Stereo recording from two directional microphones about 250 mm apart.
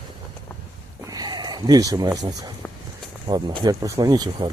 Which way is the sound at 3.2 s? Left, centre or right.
Centre.